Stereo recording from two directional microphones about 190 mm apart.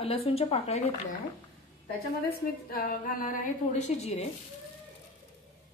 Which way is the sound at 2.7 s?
50° left (ahead or behind).